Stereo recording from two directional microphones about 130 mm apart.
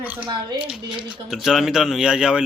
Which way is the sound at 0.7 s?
5° right (ahead or behind).